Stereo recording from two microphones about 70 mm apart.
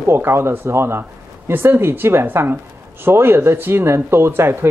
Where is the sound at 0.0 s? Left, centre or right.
Right.